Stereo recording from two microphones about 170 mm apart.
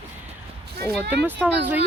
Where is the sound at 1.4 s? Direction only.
10° right (ahead or behind).